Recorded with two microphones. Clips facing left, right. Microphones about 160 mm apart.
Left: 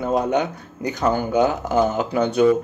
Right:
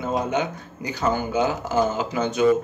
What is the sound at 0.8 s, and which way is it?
Speech, 60° left (ahead or behind).